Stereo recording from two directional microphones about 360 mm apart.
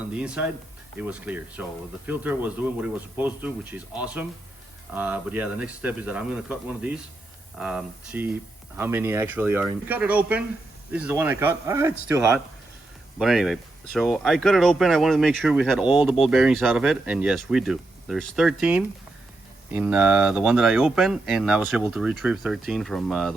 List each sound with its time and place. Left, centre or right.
0.1 s speech: centre